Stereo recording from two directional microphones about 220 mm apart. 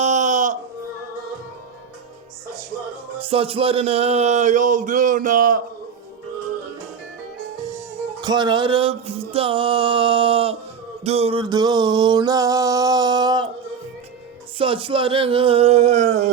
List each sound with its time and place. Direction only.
0.0 s a sound: 35° right (ahead or behind)
3.2 s music: 25° right (ahead or behind)
8.2 s music: 20° right (ahead or behind)
14.6 s music: 25° right (ahead or behind)